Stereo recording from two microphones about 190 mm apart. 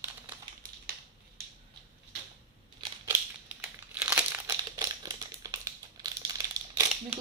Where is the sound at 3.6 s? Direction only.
5° right (ahead or behind).